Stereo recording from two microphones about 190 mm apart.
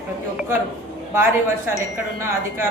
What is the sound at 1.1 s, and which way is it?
Speech, 10° right (ahead or behind).